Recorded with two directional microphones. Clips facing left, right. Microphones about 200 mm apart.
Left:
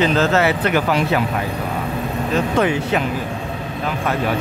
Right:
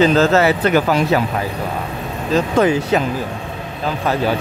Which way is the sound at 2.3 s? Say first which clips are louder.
Right 4 dB; 35° right (ahead or behind).